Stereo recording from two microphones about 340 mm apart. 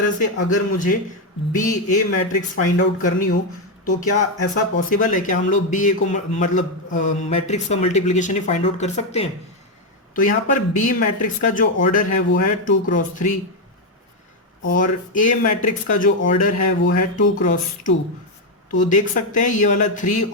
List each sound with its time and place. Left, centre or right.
0.0 s a man's voice: left
4.9 s a man's voice: left
14.6 s a man's voice: left